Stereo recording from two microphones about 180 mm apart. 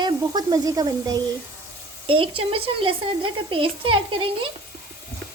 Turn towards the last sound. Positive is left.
turn(degrees=-30)  # may be behind; listen again after turning